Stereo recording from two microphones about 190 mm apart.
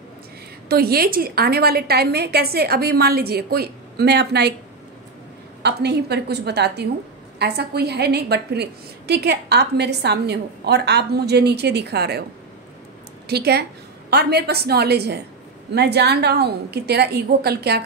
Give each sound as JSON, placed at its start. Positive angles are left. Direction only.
{"t": 0.7, "sound": "a woman's voice", "side_deg": -55}
{"t": 5.6, "sound": "a woman's voice", "side_deg": -60}
{"t": 13.3, "sound": "a woman's voice", "side_deg": -60}